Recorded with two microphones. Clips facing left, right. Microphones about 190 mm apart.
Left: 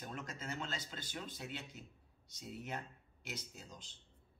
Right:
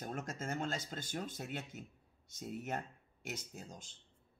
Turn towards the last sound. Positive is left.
turn(degrees=-50)  # may be behind; listen again after turning